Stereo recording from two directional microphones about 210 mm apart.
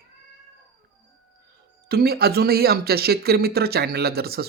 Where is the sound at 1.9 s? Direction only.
45° right (ahead or behind).